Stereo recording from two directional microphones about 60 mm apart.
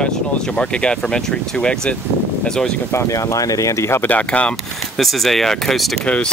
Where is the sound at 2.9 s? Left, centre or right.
Left.